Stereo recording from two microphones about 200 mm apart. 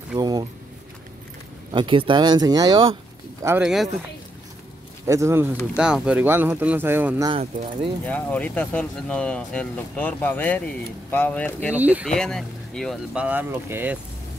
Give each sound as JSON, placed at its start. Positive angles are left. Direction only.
{"t": 0.1, "sound": "a sound", "side_deg": -20}
{"t": 1.7, "sound": "speech", "side_deg": -25}
{"t": 3.4, "sound": "speech", "side_deg": -5}
{"t": 5.0, "sound": "speech", "side_deg": -15}
{"t": 8.0, "sound": "speech", "side_deg": 5}
{"t": 11.7, "sound": "speech", "side_deg": -10}
{"t": 12.1, "sound": "speech", "side_deg": 5}